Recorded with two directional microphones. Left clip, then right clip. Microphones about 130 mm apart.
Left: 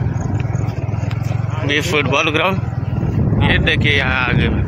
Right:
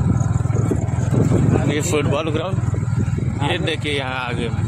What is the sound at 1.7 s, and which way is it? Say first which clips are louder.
Speech: left 10 dB; 25° right (ahead or behind).